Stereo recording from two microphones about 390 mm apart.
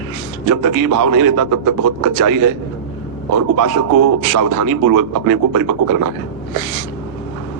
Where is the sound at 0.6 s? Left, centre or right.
Right.